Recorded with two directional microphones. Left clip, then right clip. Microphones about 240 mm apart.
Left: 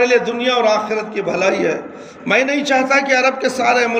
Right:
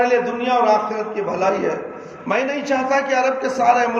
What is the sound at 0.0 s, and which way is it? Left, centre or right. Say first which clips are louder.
A man's voice: left 3 dB; left.